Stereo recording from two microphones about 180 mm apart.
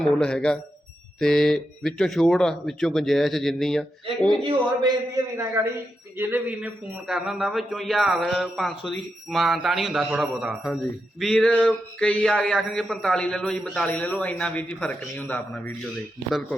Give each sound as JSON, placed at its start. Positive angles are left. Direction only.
{"t": 0.0, "sound": "speech", "side_deg": 5}
{"t": 4.4, "sound": "a man's voice", "side_deg": -20}